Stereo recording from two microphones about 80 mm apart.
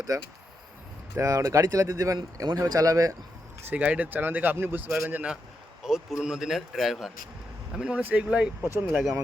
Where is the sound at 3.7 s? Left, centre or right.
Centre.